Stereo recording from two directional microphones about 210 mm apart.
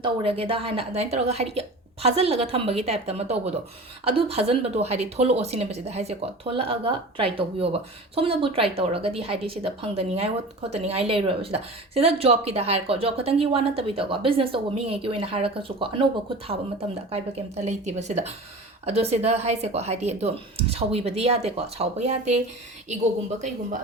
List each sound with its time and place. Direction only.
0.0 s speech: 25° right (ahead or behind)
17.1 s speech: 30° right (ahead or behind)